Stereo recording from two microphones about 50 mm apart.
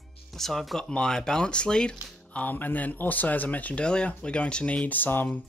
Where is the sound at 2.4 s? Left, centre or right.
Left.